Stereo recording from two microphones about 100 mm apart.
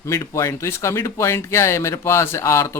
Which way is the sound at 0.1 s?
30° left (ahead or behind).